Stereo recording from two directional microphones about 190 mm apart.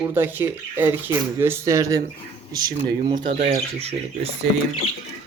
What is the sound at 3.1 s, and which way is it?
Speech, 25° right (ahead or behind).